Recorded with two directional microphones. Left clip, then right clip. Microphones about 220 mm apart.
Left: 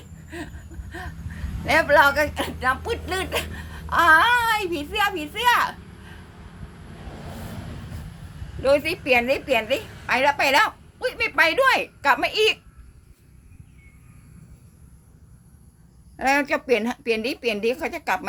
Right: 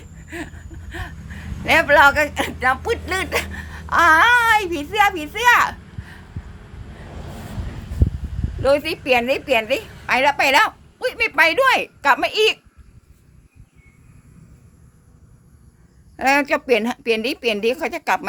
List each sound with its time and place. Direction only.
0.3 s a sound: 30° right (ahead or behind)
1.6 s speech: 30° right (ahead or behind)
8.6 s a woman's voice: 25° right (ahead or behind)
16.1 s speech: 35° right (ahead or behind)